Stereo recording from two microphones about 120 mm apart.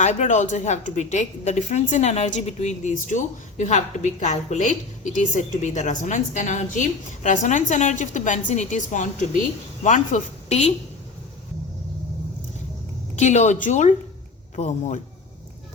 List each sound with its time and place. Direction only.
0.0 s a woman's voice: 85° left; by 10.8 s 65° left (ahead or behind)
13.1 s a woman's voice: 75° left (ahead or behind)
14.5 s a man's voice: 70° left (ahead or behind)